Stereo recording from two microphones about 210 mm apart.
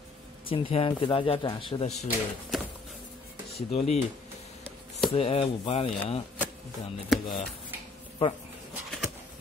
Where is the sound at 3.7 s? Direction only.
30° left (ahead or behind).